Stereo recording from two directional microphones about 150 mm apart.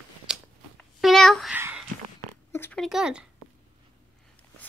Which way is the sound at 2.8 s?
5° right (ahead or behind).